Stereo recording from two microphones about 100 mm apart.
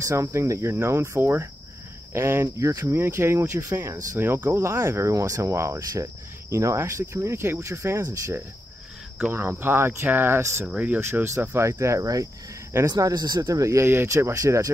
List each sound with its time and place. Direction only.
0.0 s speech: 30° right (ahead or behind)